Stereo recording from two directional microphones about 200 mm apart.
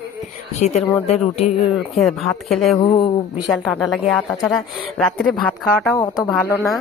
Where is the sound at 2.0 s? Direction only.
Centre (ahead or behind).